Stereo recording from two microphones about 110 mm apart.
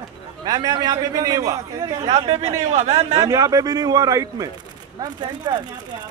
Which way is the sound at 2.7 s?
80° right.